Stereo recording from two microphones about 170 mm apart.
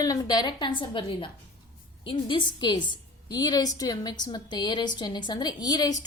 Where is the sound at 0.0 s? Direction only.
20° left (ahead or behind).